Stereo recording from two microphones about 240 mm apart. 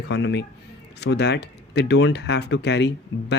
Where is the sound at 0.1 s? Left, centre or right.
Left.